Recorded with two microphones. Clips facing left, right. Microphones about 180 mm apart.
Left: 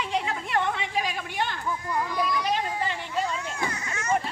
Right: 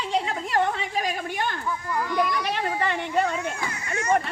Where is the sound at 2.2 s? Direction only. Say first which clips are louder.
Right 2 dB; 65° right (ahead or behind).